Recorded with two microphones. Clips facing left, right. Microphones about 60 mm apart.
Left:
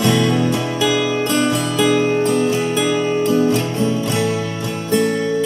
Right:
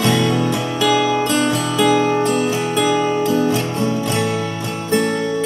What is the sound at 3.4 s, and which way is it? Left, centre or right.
Music, right.